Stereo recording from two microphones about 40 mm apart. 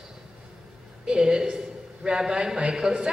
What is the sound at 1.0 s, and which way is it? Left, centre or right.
A woman's voice, centre.